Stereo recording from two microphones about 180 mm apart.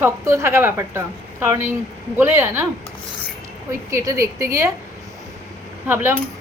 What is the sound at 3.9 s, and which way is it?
Speech, 15° right (ahead or behind).